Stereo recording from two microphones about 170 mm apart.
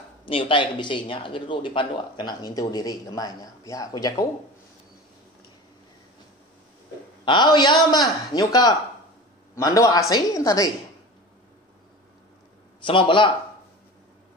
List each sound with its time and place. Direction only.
0.2 s speech: 30° left (ahead or behind)
7.2 s speech: 25° left (ahead or behind)
12.8 s speech: 30° left (ahead or behind)